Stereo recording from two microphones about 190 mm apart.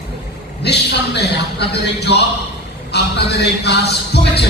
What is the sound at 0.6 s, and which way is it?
A man's voice, 60° left (ahead or behind).